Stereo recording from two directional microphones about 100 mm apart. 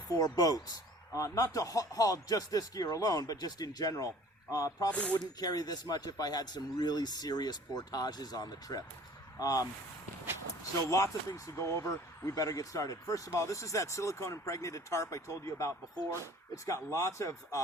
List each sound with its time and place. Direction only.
0.2 s speech: 40° left (ahead or behind)
4.9 s speech: 15° left (ahead or behind)
5.2 s speech: 40° left (ahead or behind)
10.8 s speech: 35° left (ahead or behind)